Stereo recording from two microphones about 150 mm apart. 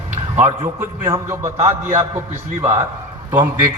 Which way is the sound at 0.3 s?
20° right (ahead or behind).